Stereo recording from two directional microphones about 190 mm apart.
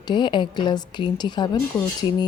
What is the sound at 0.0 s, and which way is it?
Speech, 25° left (ahead or behind).